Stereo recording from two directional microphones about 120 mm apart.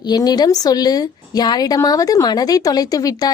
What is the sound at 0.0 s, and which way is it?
Speech, 35° left (ahead or behind).